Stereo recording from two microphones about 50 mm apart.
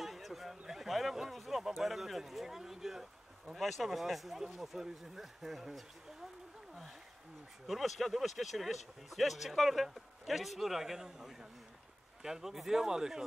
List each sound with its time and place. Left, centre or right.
0.0 s a man's voice: centre
7.6 s a man's voice: centre